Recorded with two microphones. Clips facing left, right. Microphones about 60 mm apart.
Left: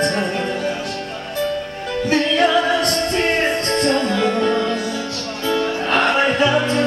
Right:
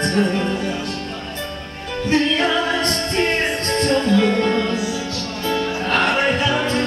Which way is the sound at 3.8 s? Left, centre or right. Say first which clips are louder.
Right 2 dB; left.